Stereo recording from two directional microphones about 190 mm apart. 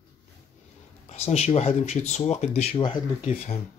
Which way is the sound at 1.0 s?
35° left (ahead or behind).